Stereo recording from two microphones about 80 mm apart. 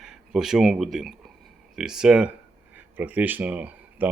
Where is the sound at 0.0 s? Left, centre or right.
Centre.